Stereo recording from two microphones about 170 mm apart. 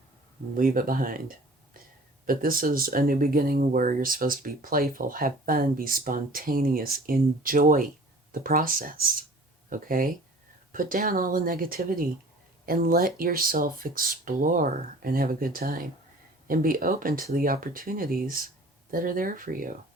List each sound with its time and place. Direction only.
0.5 s speech: 55° right (ahead or behind)
2.2 s speech: 60° right (ahead or behind)